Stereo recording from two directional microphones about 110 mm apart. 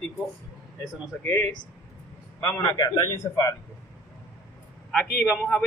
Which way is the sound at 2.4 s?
25° left (ahead or behind).